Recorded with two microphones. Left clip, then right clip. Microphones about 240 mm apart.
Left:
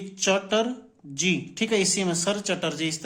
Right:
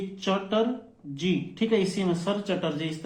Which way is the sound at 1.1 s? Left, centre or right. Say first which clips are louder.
Left 4 dB; left.